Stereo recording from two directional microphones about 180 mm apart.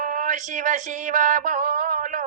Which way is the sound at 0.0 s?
45° right (ahead or behind).